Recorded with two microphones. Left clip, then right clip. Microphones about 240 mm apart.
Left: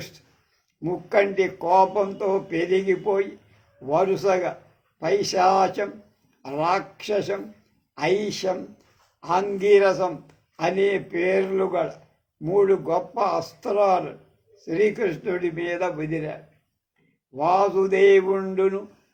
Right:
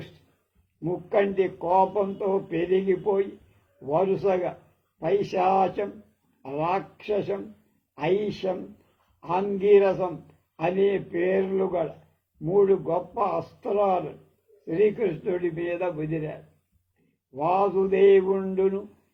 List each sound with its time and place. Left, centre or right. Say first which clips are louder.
0.8 s speech: left 3 dB; left